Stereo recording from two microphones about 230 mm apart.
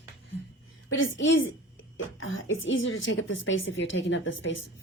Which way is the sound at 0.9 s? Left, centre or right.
Left.